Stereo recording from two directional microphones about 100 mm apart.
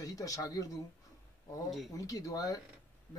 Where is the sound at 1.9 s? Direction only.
35° left (ahead or behind).